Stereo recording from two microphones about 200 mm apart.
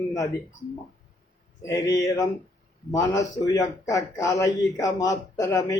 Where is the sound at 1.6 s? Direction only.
15° left (ahead or behind).